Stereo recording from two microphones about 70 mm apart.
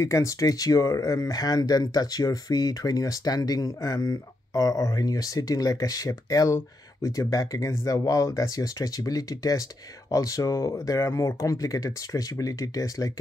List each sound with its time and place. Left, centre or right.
0.0 s speech: left